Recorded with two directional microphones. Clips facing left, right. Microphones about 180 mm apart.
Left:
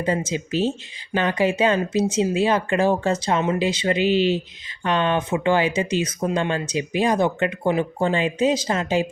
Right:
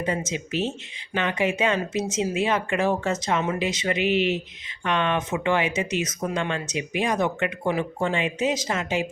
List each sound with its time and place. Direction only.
0.0 s speech: 35° left (ahead or behind)